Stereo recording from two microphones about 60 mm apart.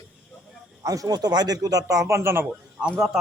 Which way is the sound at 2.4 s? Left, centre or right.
Centre.